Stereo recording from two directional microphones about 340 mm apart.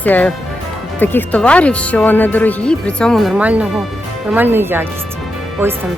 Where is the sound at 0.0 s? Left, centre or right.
Centre.